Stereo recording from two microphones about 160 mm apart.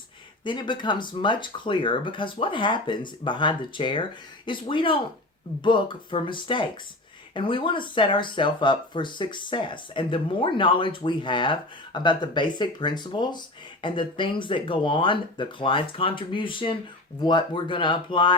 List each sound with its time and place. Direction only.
0.4 s speech: 30° left (ahead or behind)